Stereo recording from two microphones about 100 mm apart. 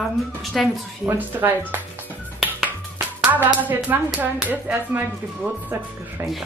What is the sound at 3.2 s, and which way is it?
Music, 20° right (ahead or behind).